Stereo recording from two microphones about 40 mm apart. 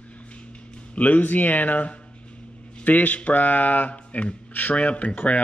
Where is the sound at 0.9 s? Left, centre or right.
Left.